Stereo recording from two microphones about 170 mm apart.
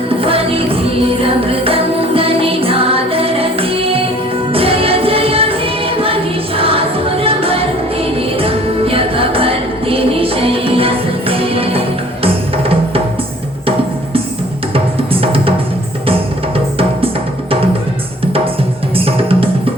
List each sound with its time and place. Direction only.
0.2 s music: 35° right (ahead or behind)
6.6 s music: 35° right (ahead or behind)
14.7 s music: 35° right (ahead or behind)
18.9 s music: 35° right (ahead or behind)